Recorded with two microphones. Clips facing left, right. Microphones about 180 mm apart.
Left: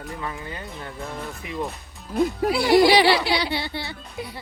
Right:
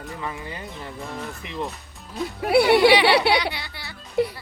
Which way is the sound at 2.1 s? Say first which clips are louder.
Left 8 dB; 55° left (ahead or behind).